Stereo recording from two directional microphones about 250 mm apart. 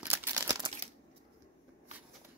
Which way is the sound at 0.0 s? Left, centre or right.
Centre.